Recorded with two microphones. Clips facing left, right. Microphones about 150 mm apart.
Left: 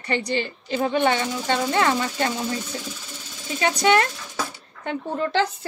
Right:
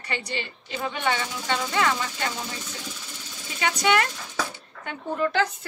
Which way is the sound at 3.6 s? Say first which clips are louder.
Left 4 dB; 40° left (ahead or behind).